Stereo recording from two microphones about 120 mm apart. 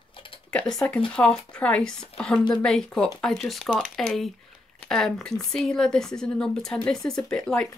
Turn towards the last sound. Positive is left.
turn(degrees=5)  # may be behind; listen again after turning